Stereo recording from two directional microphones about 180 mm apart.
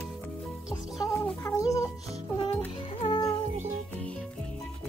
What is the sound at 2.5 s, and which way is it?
Music, 25° left (ahead or behind).